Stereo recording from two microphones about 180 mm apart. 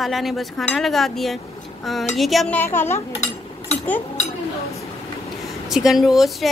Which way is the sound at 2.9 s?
35° left (ahead or behind).